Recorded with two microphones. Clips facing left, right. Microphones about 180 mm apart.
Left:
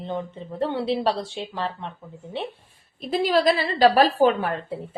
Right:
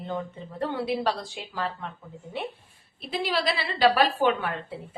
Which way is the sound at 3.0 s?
45° left (ahead or behind).